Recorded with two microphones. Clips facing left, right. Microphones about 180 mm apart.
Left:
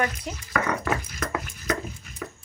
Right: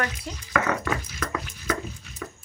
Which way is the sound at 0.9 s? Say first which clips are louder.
Left 1 dB; 5° left (ahead or behind).